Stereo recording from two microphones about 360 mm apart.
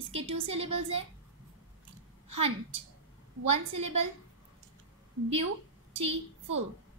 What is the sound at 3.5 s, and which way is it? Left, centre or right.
Speech, centre.